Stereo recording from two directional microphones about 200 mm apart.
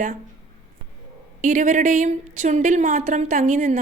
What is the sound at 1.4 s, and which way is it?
A woman's voice, 40° right (ahead or behind).